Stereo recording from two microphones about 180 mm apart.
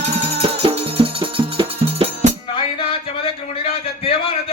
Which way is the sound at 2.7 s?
30° left (ahead or behind).